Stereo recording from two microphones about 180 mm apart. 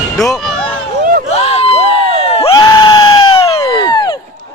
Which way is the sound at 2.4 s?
20° left (ahead or behind).